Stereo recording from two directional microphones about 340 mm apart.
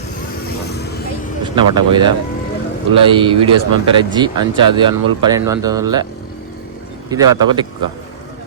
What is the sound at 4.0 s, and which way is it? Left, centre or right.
Speech, centre.